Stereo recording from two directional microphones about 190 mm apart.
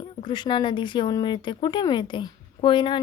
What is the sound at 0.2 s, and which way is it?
A woman's voice, 25° left (ahead or behind).